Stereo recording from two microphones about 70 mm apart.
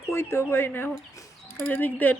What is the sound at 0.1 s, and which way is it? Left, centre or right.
Speech, left.